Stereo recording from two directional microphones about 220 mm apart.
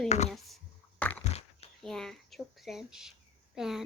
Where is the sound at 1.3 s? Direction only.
30° left (ahead or behind).